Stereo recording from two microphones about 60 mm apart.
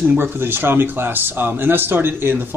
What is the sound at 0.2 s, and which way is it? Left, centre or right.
Speech, right.